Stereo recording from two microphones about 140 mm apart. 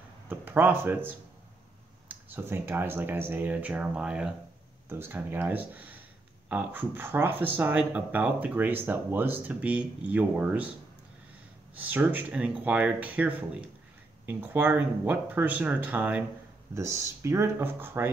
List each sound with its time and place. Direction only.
0.3 s a sound: 15° right (ahead or behind)
2.0 s speech: 15° right (ahead or behind)
11.7 s speech: 10° right (ahead or behind)